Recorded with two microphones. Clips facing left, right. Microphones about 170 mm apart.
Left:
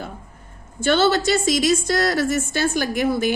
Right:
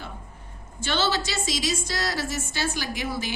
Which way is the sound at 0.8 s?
50° left (ahead or behind).